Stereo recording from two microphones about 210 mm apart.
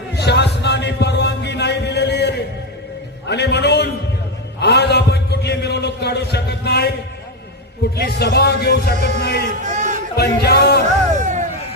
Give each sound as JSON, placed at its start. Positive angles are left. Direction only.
{"t": 0.2, "sound": "music", "side_deg": 55}
{"t": 3.2, "sound": "a sound", "side_deg": 55}
{"t": 7.9, "sound": "music", "side_deg": 50}
{"t": 9.6, "sound": "a sound", "side_deg": -35}
{"t": 10.2, "sound": "music", "side_deg": 50}
{"t": 11.2, "sound": "music", "side_deg": -35}